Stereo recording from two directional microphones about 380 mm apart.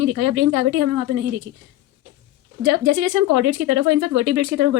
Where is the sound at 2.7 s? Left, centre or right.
Right.